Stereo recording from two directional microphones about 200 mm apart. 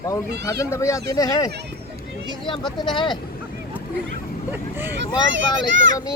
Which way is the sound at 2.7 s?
25° left (ahead or behind).